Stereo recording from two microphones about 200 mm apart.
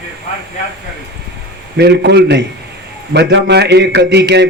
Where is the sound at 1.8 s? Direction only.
55° right (ahead or behind).